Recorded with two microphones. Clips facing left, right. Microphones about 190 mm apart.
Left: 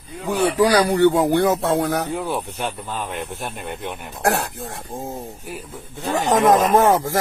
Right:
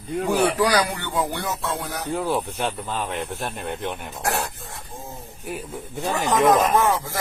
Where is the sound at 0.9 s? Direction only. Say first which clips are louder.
Left 12 dB; 45° left (ahead or behind).